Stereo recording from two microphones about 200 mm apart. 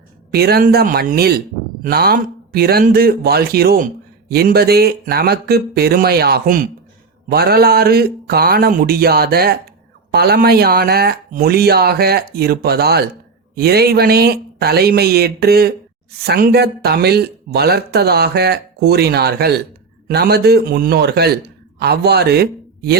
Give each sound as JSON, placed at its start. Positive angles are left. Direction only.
{"t": 0.3, "sound": "a man's voice", "side_deg": -50}